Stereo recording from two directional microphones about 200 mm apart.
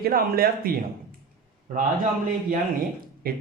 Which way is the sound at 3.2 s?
50° right (ahead or behind).